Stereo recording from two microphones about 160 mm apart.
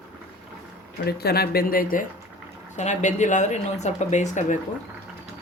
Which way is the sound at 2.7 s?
50° left (ahead or behind).